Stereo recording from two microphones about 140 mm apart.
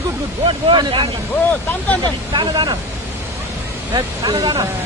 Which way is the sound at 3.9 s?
30° right (ahead or behind).